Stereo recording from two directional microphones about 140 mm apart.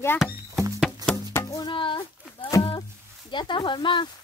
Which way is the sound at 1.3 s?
25° left (ahead or behind).